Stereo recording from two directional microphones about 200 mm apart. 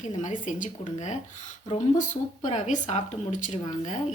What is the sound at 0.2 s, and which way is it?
A woman's voice, 40° left (ahead or behind).